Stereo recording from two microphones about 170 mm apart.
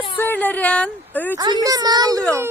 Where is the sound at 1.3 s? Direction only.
25° right (ahead or behind).